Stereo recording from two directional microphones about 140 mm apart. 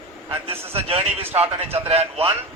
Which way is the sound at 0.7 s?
45° right (ahead or behind).